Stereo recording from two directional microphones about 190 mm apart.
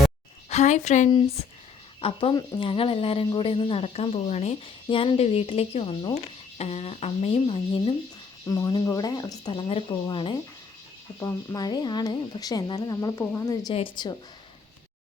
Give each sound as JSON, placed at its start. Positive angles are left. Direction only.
{"t": 0.5, "sound": "speech", "side_deg": 35}
{"t": 2.0, "sound": "speech", "side_deg": 30}
{"t": 11.2, "sound": "speech", "side_deg": 15}